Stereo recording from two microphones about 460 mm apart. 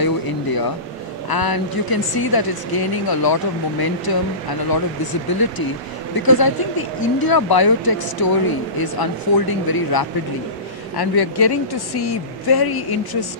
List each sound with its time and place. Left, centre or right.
0.0 s air conditioning: left
1.3 s speech: left